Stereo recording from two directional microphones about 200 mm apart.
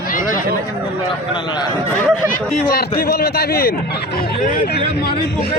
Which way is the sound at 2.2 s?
45° left (ahead or behind).